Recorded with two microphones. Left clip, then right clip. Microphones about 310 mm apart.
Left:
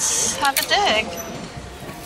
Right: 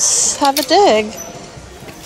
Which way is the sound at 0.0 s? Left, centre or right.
Right.